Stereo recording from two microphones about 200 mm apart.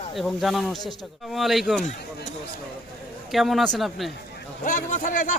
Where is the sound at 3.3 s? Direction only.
Centre (ahead or behind).